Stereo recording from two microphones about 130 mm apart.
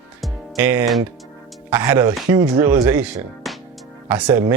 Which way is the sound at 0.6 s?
10° right (ahead or behind).